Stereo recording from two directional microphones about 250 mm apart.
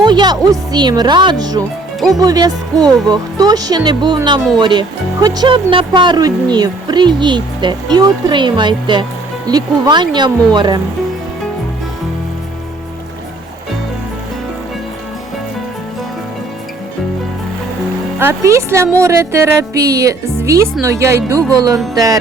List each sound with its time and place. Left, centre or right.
0.0 s speech: centre
18.2 s speech: centre